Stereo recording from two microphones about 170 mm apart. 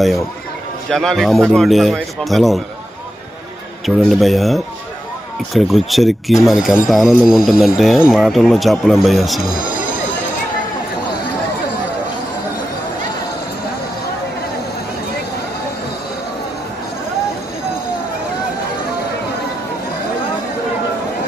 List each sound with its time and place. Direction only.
0.8 s speech: 5° left (ahead or behind)
3.8 s speech: centre (ahead or behind)
9.4 s speech: 55° left (ahead or behind)